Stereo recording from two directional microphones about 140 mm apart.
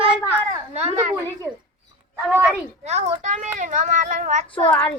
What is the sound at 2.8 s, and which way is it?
A child's voice, 50° right (ahead or behind).